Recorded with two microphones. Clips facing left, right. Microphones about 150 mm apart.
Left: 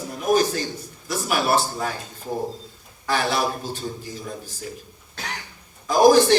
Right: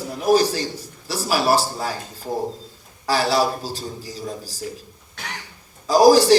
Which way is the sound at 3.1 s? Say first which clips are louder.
Right 3 dB; 35° right (ahead or behind).